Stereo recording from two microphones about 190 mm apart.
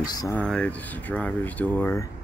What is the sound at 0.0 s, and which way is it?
Speech, 20° left (ahead or behind).